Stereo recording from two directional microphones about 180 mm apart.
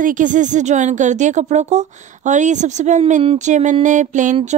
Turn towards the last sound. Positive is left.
turn(degrees=-45)  # may be behind; listen again after turning